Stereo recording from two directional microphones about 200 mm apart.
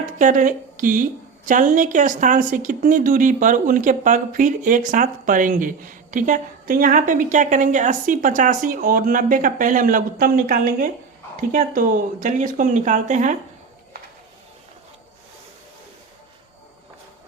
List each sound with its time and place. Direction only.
0.0 s a woman's voice: 40° right (ahead or behind)